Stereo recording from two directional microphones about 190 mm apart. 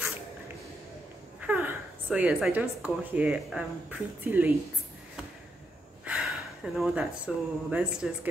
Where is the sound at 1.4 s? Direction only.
10° right (ahead or behind).